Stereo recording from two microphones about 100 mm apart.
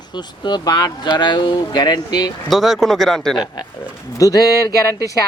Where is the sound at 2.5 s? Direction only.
Centre (ahead or behind).